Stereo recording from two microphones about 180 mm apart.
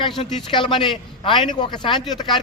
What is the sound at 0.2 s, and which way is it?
A man's voice, 30° left (ahead or behind).